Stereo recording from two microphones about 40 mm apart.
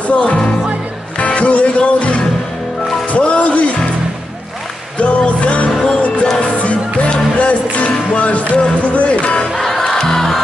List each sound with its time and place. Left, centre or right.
0.1 s music: left
4.9 s music: left
9.6 s music: centre